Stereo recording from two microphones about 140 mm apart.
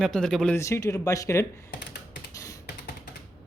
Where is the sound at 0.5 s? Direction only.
20° left (ahead or behind).